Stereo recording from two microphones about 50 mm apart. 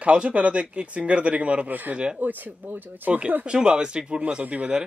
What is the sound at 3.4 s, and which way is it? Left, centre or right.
Speech, centre.